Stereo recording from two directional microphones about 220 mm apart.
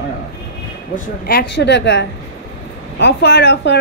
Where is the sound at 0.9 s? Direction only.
45° left (ahead or behind).